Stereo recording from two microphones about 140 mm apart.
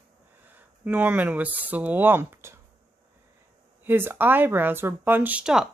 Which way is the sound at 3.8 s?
15° right (ahead or behind).